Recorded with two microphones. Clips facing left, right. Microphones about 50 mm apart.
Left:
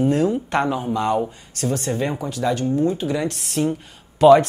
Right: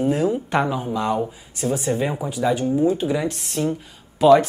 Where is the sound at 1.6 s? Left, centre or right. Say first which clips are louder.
Right 1 dB; centre.